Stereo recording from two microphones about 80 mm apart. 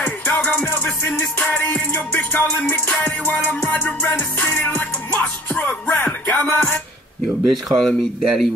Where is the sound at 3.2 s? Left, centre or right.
Left.